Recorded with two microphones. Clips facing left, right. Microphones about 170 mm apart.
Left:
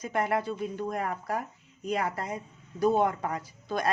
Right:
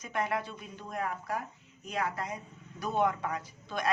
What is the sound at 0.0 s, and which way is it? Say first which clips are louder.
Speech: left 5 dB; 35° left (ahead or behind).